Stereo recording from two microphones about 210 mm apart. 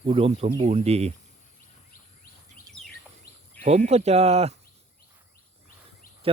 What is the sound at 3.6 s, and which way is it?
Speech, 30° right (ahead or behind).